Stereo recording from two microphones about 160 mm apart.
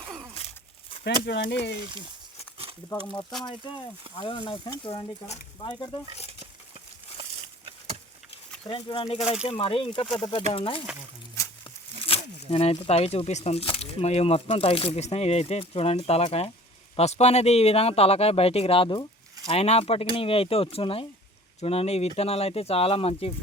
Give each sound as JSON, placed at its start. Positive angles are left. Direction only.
{"t": 1.3, "sound": "speech", "side_deg": 90}
{"t": 3.1, "sound": "speech", "side_deg": 25}
{"t": 7.2, "sound": "a sound", "side_deg": -40}
{"t": 8.7, "sound": "speech", "side_deg": 30}
{"t": 12.0, "sound": "speech", "side_deg": 35}